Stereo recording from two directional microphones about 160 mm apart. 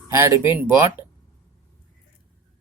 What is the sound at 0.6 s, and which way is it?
Speech, 10° right (ahead or behind).